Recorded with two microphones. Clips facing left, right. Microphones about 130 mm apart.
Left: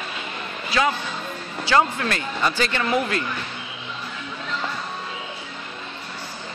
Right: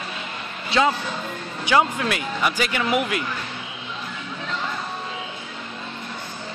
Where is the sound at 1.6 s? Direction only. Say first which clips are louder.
Even; 15° right (ahead or behind).